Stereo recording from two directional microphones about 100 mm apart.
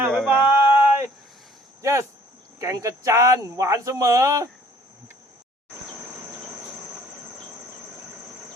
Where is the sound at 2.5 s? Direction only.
35° right (ahead or behind).